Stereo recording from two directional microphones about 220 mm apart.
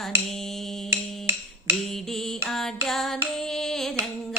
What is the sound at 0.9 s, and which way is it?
Finger snapping, 10° right (ahead or behind).